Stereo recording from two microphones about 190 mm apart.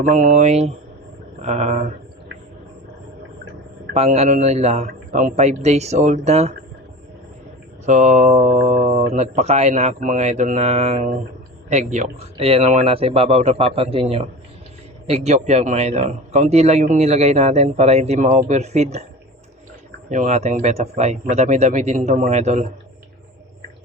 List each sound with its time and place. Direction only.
0.0 s speech: 40° right (ahead or behind)
3.9 s speech: 35° right (ahead or behind)
7.9 s speech: 40° right (ahead or behind)
20.1 s speech: 40° right (ahead or behind)